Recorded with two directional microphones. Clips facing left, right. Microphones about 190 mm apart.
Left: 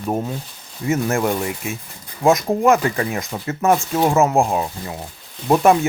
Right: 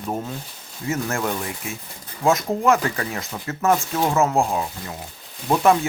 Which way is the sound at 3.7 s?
30° left (ahead or behind).